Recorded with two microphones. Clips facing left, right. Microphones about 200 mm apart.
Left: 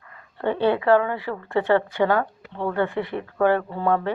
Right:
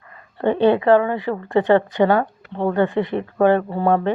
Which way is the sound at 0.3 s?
20° right (ahead or behind).